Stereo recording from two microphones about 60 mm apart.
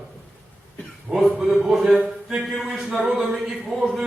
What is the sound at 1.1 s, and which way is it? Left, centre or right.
A man's voice, centre.